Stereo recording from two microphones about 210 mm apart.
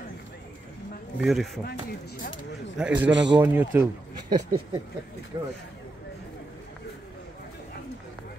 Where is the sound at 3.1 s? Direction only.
55° right (ahead or behind).